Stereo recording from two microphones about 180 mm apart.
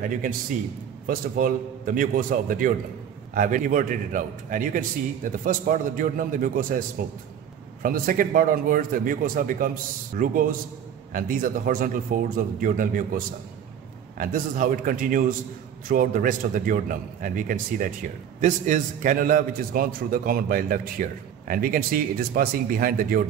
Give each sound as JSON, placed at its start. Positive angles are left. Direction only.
{"t": 1.0, "sound": "a man's voice", "side_deg": -50}
{"t": 7.8, "sound": "a man's voice", "side_deg": -50}